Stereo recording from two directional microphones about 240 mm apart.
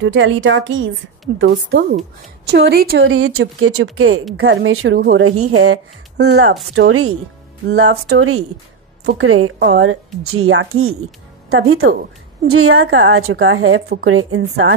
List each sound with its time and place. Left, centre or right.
0.0 s a woman's voice: right
3.1 s a woman's voice: right
5.3 s speech: right
6.1 s a woman's voice: right
9.6 s a woman's voice: right
12.4 s a woman's voice: right